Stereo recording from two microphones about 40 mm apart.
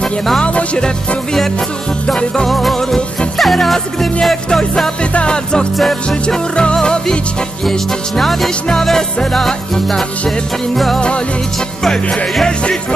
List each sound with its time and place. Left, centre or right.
0.4 s music: left
2.4 s music: centre
5.1 s music: left
8.2 s music: centre